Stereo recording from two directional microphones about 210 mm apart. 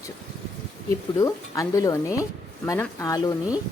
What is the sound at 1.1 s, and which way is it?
Speech, 15° left (ahead or behind).